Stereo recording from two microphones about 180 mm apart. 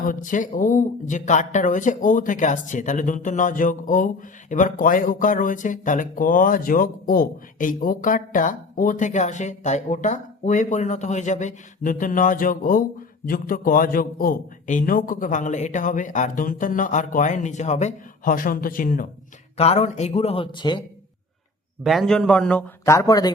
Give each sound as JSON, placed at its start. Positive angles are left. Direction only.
{"t": 0.1, "sound": "speech", "side_deg": 45}
{"t": 19.5, "sound": "speech", "side_deg": 35}
{"t": 21.8, "sound": "a man's voice", "side_deg": 0}